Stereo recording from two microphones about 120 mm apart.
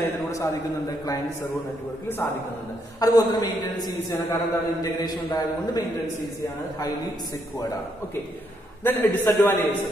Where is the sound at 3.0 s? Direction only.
30° left (ahead or behind).